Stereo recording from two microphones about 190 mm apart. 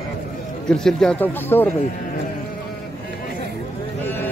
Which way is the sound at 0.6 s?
5° left (ahead or behind).